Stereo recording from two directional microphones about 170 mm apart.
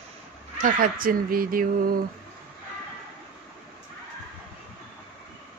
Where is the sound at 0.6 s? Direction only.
55° right (ahead or behind).